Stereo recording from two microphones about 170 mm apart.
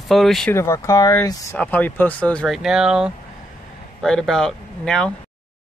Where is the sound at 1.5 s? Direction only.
10° left (ahead or behind).